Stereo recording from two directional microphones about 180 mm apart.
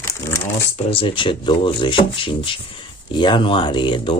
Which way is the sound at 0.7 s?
30° left (ahead or behind).